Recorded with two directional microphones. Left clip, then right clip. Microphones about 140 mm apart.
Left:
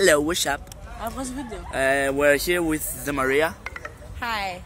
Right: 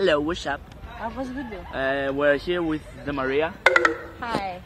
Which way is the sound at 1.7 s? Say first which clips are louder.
Left 4 dB; 20° left (ahead or behind).